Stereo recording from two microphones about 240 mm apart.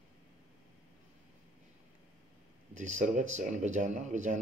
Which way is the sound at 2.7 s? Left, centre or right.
Right.